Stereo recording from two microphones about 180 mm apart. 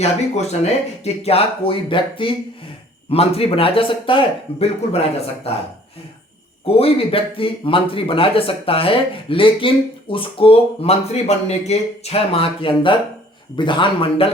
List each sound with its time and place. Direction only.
0.0 s speech: 35° left (ahead or behind)
6.7 s a man's voice: 35° left (ahead or behind)